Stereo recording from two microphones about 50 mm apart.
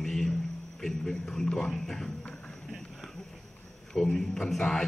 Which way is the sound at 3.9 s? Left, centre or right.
Centre.